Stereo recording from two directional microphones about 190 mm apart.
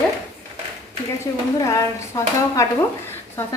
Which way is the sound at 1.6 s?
15° left (ahead or behind).